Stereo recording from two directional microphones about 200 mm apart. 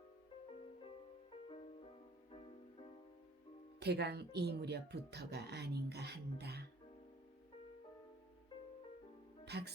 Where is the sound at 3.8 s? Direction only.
55° right (ahead or behind).